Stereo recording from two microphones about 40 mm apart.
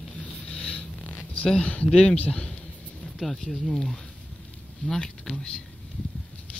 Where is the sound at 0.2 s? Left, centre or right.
Left.